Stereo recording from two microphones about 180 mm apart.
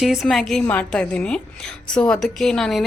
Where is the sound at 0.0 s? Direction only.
Centre (ahead or behind).